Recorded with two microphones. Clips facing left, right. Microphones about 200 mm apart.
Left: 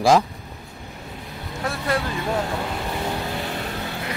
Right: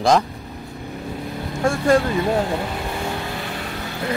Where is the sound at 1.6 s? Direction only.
45° right (ahead or behind).